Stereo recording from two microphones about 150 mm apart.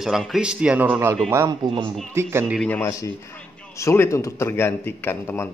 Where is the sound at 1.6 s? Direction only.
35° right (ahead or behind).